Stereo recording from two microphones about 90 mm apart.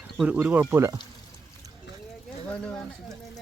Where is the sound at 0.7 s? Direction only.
35° right (ahead or behind).